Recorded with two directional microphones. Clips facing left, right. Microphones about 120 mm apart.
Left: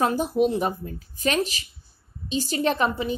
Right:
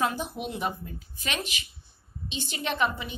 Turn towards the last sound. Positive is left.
turn(degrees=35)  # may be behind; listen again after turning